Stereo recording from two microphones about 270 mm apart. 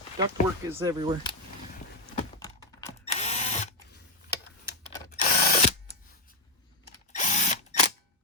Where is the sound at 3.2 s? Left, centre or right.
Left.